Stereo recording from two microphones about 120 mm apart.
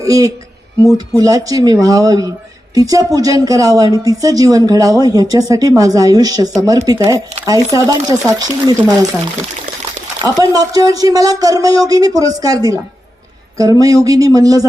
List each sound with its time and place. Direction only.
0.0 s speech: 30° right (ahead or behind)
10.3 s speech: 35° right (ahead or behind)